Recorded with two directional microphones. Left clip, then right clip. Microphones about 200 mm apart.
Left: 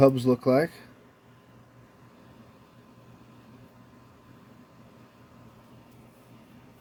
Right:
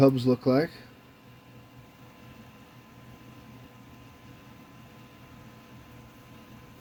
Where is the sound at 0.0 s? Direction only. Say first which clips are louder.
Left 2 dB; 15° left (ahead or behind).